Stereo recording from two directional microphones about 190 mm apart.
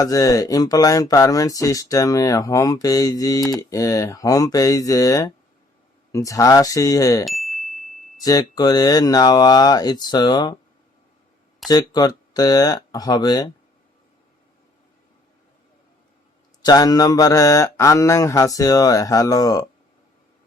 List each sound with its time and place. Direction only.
0.0 s speech: 20° left (ahead or behind)
7.3 s a sound: centre (ahead or behind)
8.2 s speech: 20° left (ahead or behind)
11.7 s speech: 20° left (ahead or behind)
16.6 s speech: 20° left (ahead or behind)